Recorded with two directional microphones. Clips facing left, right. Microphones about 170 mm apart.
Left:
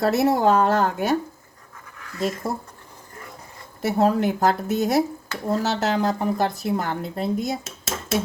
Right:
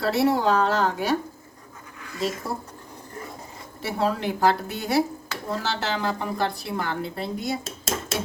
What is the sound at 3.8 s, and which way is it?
A woman's voice, 45° left (ahead or behind).